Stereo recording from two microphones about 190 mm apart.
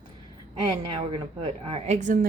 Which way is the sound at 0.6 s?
25° right (ahead or behind).